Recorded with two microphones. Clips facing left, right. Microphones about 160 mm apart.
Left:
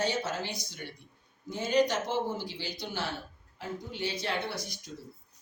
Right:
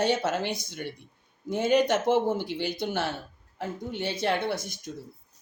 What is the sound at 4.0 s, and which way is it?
Speech, 55° right (ahead or behind).